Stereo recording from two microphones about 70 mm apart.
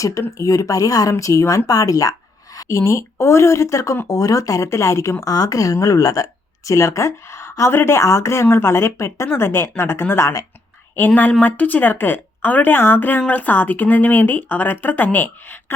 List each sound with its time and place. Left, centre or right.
0.0 s a woman's voice: left
2.6 s a woman's voice: left
5.2 s a woman's voice: left
10.9 s a woman's voice: left